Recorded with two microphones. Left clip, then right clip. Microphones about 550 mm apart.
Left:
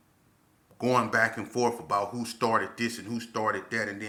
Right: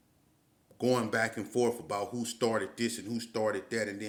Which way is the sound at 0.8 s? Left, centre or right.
Right.